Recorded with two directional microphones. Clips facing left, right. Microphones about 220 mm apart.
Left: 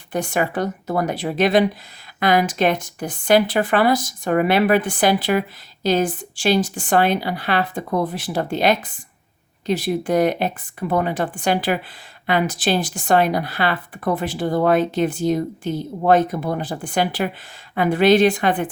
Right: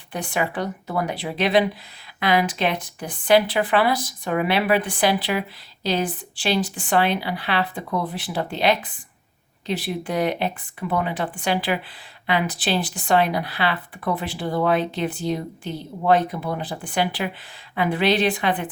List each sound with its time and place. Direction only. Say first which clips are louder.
0.1 s speech: left 4 dB; 45° left (ahead or behind)